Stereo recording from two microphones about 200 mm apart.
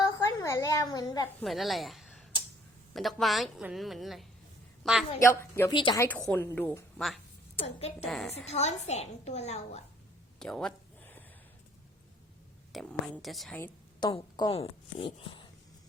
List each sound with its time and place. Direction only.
0.0 s a sound: 15° left (ahead or behind)
1.4 s a woman's voice: centre (ahead or behind)
5.2 s a woman's voice: 15° left (ahead or behind)
6.1 s a woman's voice: 10° left (ahead or behind)
7.6 s a child's voice: 30° left (ahead or behind)
8.0 s a woman's voice: centre (ahead or behind)
8.4 s a child's voice: 35° left (ahead or behind)
10.4 s a sound: 5° left (ahead or behind)
12.7 s a woman's voice: 5° left (ahead or behind)
13.7 s a woman's voice: 20° left (ahead or behind)